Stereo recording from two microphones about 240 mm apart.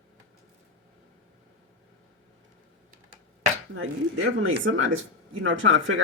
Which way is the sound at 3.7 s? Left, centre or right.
Right.